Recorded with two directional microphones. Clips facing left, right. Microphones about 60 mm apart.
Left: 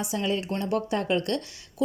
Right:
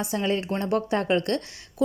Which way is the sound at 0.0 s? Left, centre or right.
Right.